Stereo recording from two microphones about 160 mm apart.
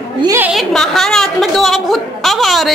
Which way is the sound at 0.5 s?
Centre (ahead or behind).